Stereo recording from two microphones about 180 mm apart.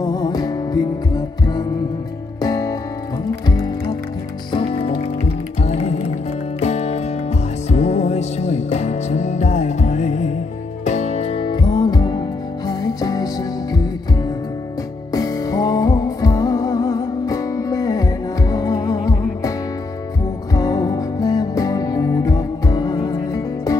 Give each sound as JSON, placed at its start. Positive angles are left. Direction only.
{"t": 0.0, "sound": "music", "side_deg": 20}
{"t": 15.1, "sound": "music", "side_deg": 20}
{"t": 20.5, "sound": "music", "side_deg": 20}